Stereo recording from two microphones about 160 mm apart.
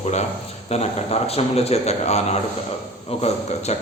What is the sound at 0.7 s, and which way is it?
Speech, 40° left (ahead or behind).